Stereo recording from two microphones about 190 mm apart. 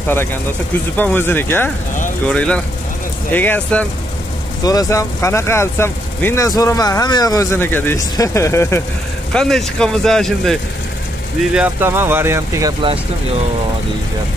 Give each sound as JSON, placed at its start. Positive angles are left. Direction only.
{"t": 0.9, "sound": "speech", "side_deg": 10}
{"t": 9.3, "sound": "speech", "side_deg": 5}
{"t": 11.5, "sound": "speech", "side_deg": -10}